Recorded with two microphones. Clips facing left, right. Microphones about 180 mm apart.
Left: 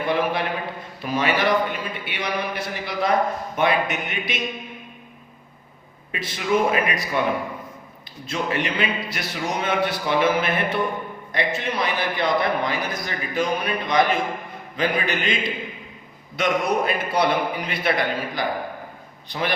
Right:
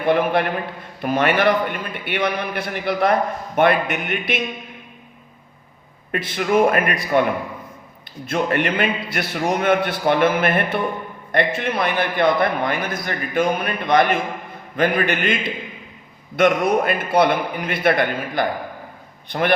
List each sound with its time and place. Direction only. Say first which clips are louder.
0.0 s a man's voice: right 5 dB; 55° right (ahead or behind)
6.1 s a man's voice: right 3 dB; 55° right (ahead or behind)
8.3 s a man's voice: right 5 dB; 55° right (ahead or behind)